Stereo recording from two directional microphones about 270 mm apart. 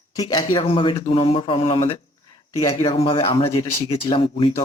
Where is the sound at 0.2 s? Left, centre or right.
Centre.